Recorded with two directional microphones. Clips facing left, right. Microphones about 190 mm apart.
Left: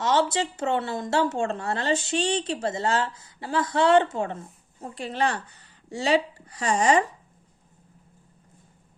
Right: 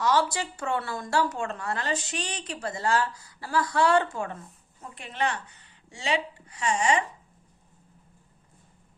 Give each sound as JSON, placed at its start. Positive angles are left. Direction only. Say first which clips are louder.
{"t": 0.0, "sound": "a woman's voice", "louder": "left 2 dB", "side_deg": 25}